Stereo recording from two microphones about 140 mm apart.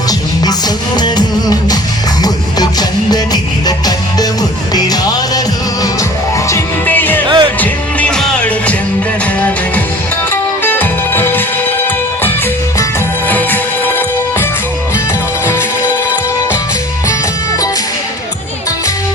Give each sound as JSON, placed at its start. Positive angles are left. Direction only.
{"t": 0.9, "sound": "music", "side_deg": 30}
{"t": 6.5, "sound": "music", "side_deg": 15}
{"t": 7.3, "sound": "music", "side_deg": -35}
{"t": 7.6, "sound": "music", "side_deg": 10}
{"t": 10.6, "sound": "music", "side_deg": 15}
{"t": 13.2, "sound": "music", "side_deg": 15}